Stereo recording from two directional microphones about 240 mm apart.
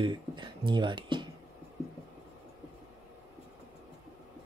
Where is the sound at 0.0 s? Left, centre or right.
Centre.